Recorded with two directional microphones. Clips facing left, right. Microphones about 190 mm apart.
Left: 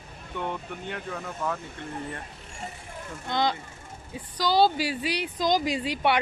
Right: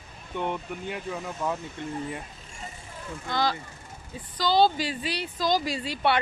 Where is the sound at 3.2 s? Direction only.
20° left (ahead or behind).